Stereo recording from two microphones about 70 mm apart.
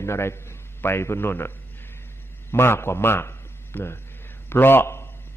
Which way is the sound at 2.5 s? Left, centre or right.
Left.